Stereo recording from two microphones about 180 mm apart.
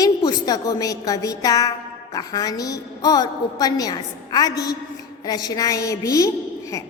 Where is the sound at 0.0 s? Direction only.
20° left (ahead or behind).